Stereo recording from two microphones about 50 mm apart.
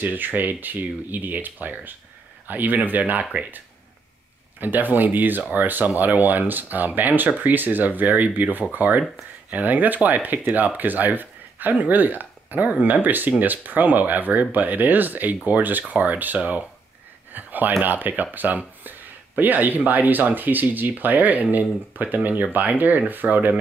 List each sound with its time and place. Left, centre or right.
0.0 s speech: right
4.6 s speech: right
17.3 s a sound: right
17.8 s speech: right